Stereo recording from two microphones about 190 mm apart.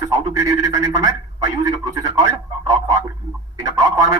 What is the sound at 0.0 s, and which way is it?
A man's voice, 15° right (ahead or behind).